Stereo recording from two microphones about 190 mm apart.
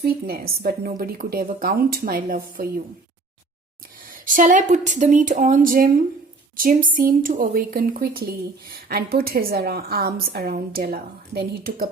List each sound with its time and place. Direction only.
0.0 s a woman's voice: 55° right (ahead or behind)
4.1 s a woman's voice: 45° right (ahead or behind)